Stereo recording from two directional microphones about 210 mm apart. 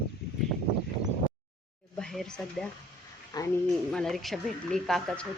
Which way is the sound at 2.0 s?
Centre (ahead or behind).